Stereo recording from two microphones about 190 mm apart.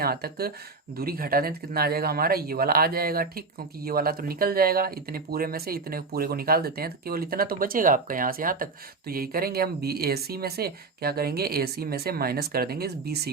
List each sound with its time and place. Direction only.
0.0 s speech: 55° right (ahead or behind)